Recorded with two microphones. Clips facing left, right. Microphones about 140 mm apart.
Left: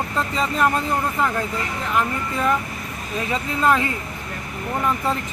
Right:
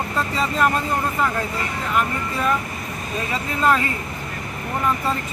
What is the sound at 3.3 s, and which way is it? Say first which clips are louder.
Speech: even; 15° left (ahead or behind).